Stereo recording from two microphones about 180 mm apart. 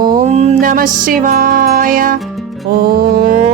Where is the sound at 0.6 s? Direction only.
50° right (ahead or behind).